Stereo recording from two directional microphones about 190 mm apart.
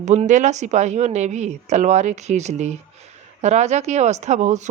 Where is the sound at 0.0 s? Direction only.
40° right (ahead or behind).